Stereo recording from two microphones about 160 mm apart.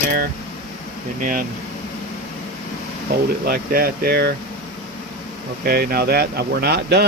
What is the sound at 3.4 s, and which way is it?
Speech, 70° right (ahead or behind).